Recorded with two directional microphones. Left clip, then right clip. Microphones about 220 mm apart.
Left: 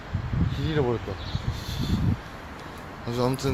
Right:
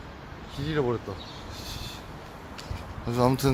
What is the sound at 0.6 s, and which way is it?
Speech, 5° left (ahead or behind).